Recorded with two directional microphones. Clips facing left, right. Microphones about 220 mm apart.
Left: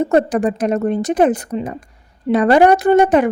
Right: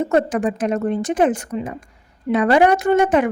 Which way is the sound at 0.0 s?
35° left (ahead or behind).